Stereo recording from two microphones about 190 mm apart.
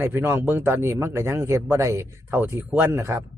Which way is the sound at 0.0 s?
10° right (ahead or behind).